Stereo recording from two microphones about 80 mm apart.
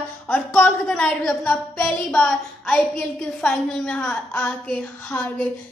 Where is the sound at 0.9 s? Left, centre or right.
Centre.